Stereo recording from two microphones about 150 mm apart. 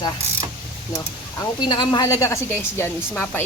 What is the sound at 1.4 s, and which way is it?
A woman's voice, 30° left (ahead or behind).